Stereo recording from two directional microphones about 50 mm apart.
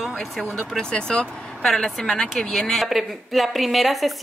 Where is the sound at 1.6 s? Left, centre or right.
Centre.